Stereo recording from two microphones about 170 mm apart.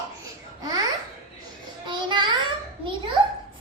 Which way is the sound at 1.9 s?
25° right (ahead or behind).